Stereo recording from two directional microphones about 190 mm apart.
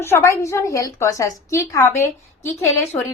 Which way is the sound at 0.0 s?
15° left (ahead or behind).